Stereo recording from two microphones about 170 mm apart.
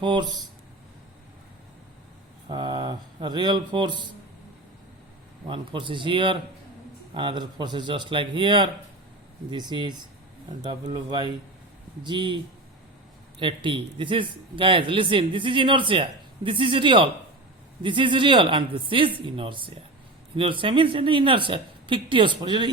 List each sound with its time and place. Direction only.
0.0 s speech: 25° right (ahead or behind)
2.5 s speech: 25° right (ahead or behind)
5.5 s speech: 30° right (ahead or behind)
13.4 s speech: 30° right (ahead or behind)